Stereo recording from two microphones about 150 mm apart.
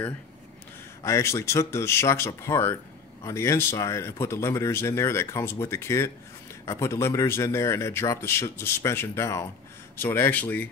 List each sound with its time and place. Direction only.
1.0 s speech: 20° left (ahead or behind)